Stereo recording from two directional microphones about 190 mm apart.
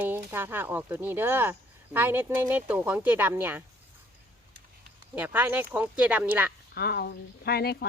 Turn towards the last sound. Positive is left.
turn(degrees=55)  # may be behind; listen again after turning